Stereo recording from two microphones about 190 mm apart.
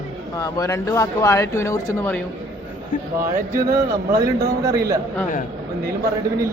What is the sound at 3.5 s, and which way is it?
Speech, 15° right (ahead or behind).